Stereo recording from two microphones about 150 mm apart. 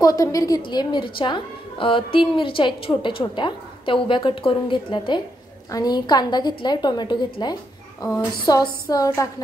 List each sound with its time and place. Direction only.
0.0 s a woman's voice: 20° left (ahead or behind)